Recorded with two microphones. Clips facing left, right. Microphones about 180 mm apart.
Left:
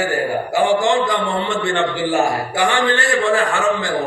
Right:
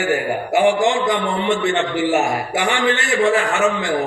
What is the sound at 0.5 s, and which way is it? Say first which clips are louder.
A man's voice: right 1 dB; 20° right (ahead or behind).